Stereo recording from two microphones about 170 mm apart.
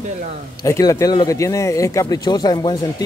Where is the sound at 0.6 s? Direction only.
20° left (ahead or behind).